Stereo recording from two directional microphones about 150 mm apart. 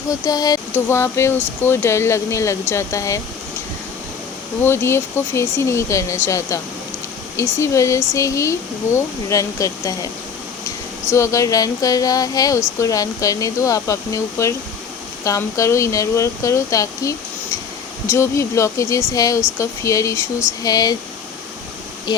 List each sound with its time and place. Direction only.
0.1 s speech: 25° left (ahead or behind)
4.6 s speech: 15° left (ahead or behind)
11.1 s speech: 20° left (ahead or behind)